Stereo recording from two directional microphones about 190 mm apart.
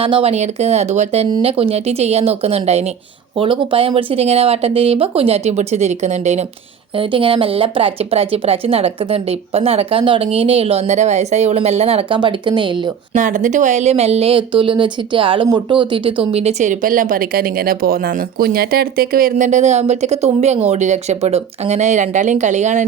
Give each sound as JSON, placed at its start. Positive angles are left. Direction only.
{"t": 0.0, "sound": "speech", "side_deg": -30}
{"t": 13.1, "sound": "speech", "side_deg": -40}